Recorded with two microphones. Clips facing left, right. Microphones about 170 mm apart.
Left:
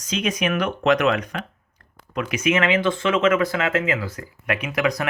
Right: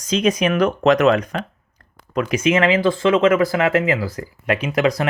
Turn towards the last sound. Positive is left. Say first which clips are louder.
# right 4 dB
turn(degrees=-30)  # may be behind; listen again after turning